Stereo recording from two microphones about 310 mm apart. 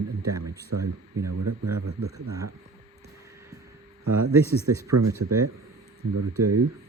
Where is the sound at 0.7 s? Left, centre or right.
Right.